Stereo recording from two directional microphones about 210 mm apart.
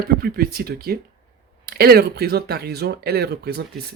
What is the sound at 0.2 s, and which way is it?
Speech, 45° right (ahead or behind).